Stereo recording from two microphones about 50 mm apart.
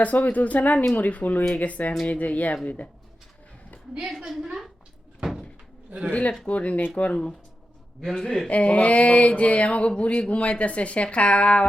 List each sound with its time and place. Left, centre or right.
0.0 s speech: left
4.2 s a woman's voice: centre
5.2 s door: centre
6.1 s speech: left
7.1 s speech: centre
8.4 s speech: left